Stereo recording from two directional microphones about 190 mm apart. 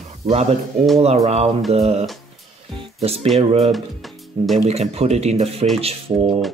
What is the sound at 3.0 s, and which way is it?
Speech, 30° right (ahead or behind).